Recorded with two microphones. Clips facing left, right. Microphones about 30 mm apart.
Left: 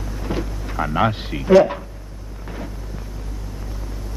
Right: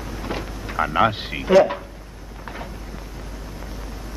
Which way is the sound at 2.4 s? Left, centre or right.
Centre.